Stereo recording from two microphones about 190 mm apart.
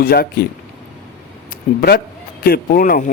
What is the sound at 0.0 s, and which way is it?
Speech, 50° left (ahead or behind).